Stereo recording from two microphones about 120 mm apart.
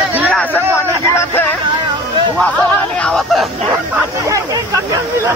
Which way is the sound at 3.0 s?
5° left (ahead or behind).